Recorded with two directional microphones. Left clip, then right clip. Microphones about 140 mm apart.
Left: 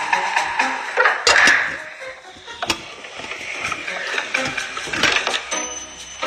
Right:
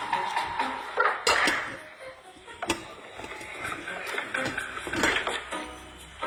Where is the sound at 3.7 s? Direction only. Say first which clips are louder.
Left 8 dB; 30° left (ahead or behind).